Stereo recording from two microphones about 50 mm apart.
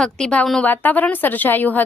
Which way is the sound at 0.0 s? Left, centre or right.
Centre.